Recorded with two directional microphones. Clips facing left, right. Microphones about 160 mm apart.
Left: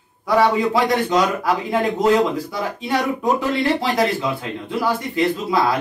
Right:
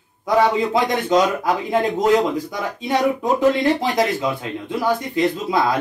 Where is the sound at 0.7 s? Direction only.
20° right (ahead or behind).